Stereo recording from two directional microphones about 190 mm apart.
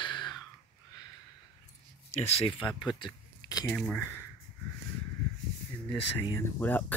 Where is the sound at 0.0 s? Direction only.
25° left (ahead or behind).